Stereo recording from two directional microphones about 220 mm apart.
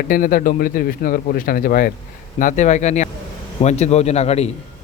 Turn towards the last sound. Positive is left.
turn(degrees=30)  # may be behind; listen again after turning